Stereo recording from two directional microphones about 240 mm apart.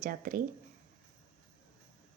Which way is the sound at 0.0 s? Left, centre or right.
Right.